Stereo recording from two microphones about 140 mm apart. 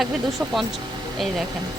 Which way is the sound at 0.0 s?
Centre (ahead or behind).